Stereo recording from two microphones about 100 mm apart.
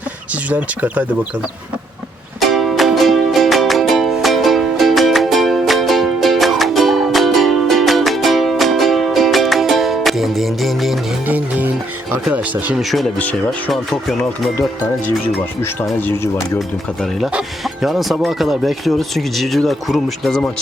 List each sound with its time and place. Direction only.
0.5 s speech: 15° right (ahead or behind)
2.4 s music: centre (ahead or behind)
11.3 s music: 15° right (ahead or behind)
12.3 s speech: 15° right (ahead or behind)
12.7 s speech: centre (ahead or behind)
15.6 s speech: 20° left (ahead or behind)
16.6 s speech: centre (ahead or behind)